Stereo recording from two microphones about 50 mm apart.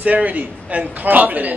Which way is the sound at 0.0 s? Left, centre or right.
Right.